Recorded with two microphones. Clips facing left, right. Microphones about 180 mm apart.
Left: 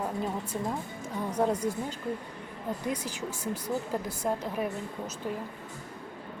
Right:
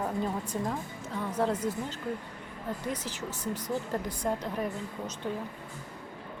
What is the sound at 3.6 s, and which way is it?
A woman's voice, 10° left (ahead or behind).